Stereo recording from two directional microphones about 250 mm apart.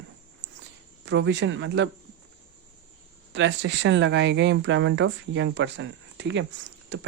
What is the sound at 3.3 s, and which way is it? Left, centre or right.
Speech, right.